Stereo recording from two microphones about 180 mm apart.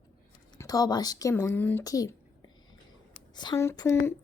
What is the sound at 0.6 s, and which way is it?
Speech, 20° left (ahead or behind).